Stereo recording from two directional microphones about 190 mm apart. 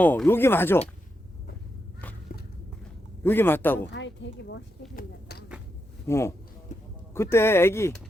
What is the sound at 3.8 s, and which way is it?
Speech, 70° left (ahead or behind).